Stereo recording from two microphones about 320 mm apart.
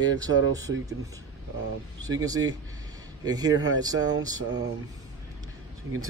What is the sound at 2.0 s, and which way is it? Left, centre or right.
Speech, centre.